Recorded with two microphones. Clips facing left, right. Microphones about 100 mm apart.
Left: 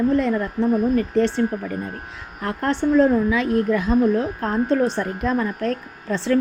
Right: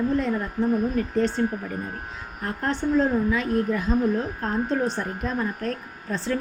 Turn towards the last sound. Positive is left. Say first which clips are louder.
# left 6 dB
turn(degrees=80)